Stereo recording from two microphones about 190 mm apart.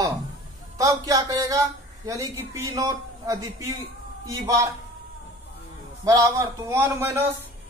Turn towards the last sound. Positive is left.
turn(degrees=-15)  # may be behind; listen again after turning